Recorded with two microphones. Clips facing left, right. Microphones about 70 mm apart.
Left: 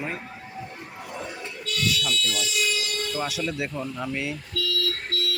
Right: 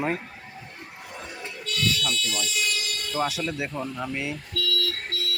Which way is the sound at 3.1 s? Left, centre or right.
Right.